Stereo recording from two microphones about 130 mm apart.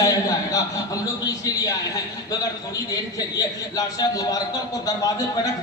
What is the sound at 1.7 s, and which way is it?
Speech, 25° left (ahead or behind).